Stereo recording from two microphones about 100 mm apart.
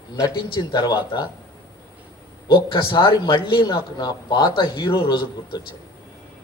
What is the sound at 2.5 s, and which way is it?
A man's voice, 55° left (ahead or behind).